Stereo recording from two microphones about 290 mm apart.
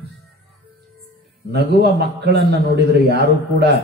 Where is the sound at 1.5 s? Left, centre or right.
Right.